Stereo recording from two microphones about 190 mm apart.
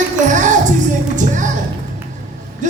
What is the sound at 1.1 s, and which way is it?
Music, 40° right (ahead or behind).